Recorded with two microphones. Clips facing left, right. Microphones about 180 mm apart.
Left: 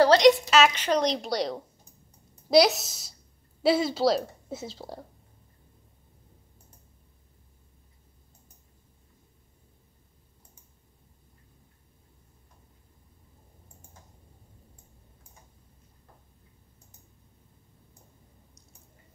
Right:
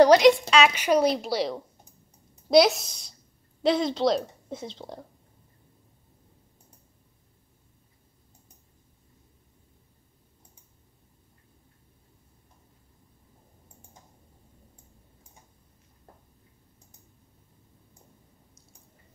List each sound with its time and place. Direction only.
0.2 s a woman's voice: centre (ahead or behind)